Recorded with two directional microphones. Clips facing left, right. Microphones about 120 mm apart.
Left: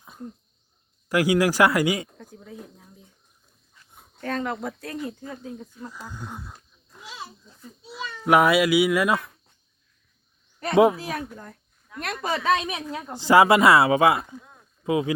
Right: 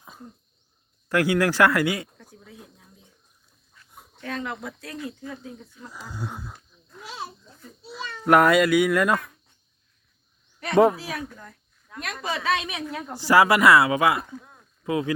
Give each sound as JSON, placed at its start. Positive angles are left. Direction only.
{"t": 0.0, "sound": "cough", "side_deg": -5}
{"t": 1.1, "sound": "speech", "side_deg": 10}
{"t": 2.1, "sound": "a sound", "side_deg": 40}
{"t": 4.2, "sound": "speech", "side_deg": 40}
{"t": 6.1, "sound": "speech", "side_deg": -10}
{"t": 7.9, "sound": "speech", "side_deg": 5}
{"t": 10.9, "sound": "a woman's voice", "side_deg": 45}
{"t": 13.1, "sound": "speech", "side_deg": 20}